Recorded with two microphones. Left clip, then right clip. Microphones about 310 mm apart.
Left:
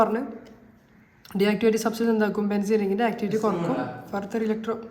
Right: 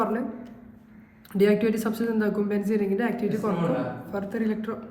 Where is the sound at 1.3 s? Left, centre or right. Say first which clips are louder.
Even; centre.